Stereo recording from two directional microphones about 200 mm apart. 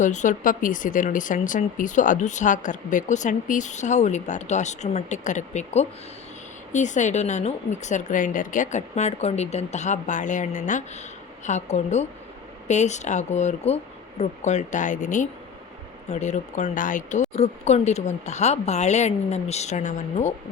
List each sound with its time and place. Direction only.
0.0 s speech: 40° left (ahead or behind)